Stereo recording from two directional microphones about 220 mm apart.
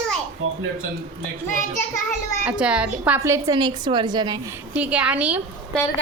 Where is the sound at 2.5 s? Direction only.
5° right (ahead or behind).